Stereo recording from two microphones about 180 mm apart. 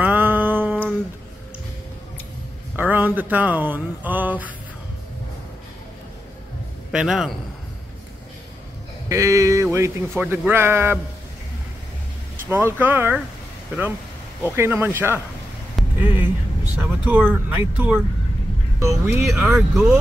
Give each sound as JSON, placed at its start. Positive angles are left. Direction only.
{"t": 0.0, "sound": "a sound", "side_deg": -10}
{"t": 2.7, "sound": "speech", "side_deg": -10}
{"t": 6.9, "sound": "a man's voice", "side_deg": -5}
{"t": 9.1, "sound": "a man's voice", "side_deg": -15}
{"t": 12.4, "sound": "a man's voice", "side_deg": -10}
{"t": 14.4, "sound": "a man's voice", "side_deg": -15}